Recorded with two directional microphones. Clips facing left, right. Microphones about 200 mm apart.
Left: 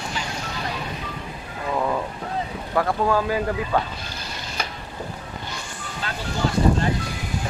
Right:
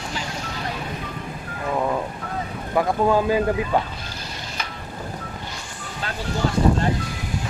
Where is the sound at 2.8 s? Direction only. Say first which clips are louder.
Right 2 dB; 20° right (ahead or behind).